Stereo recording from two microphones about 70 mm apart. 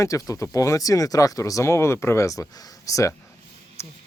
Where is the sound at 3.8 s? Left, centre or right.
Left.